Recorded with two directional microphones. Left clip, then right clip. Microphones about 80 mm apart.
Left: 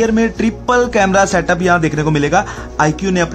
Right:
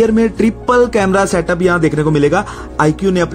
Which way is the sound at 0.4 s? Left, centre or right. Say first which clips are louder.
Right 4 dB; right.